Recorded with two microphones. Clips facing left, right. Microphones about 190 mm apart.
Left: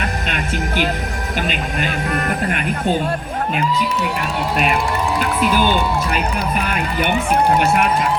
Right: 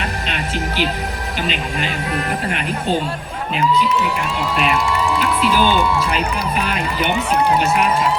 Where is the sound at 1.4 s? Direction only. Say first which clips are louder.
Left 1 dB; 50° left (ahead or behind).